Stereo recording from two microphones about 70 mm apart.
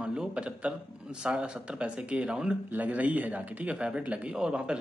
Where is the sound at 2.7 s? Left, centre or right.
Right.